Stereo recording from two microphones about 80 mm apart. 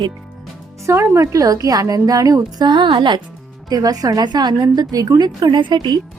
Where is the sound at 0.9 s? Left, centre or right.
Right.